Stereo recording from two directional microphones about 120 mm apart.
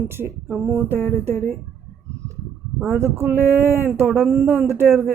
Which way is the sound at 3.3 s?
20° right (ahead or behind).